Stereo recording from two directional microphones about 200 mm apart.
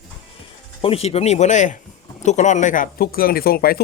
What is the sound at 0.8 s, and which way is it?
Speech, 30° left (ahead or behind).